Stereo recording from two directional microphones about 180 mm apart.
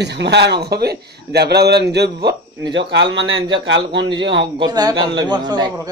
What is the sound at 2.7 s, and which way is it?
Speech, 85° right.